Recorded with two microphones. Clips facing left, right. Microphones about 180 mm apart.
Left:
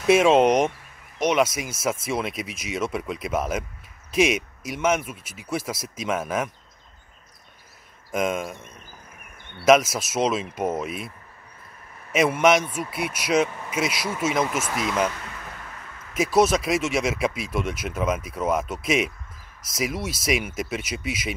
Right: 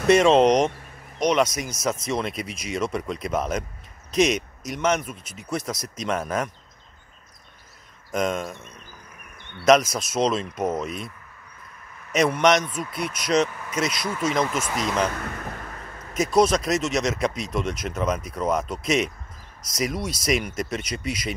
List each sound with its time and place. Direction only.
0.1 s speech: 5° left (ahead or behind)
8.1 s speech: 5° left (ahead or behind)
9.7 s speech: 5° left (ahead or behind)
12.1 s speech: 5° left (ahead or behind)
15.1 s a sound: 50° right (ahead or behind)
16.2 s speech: 5° left (ahead or behind)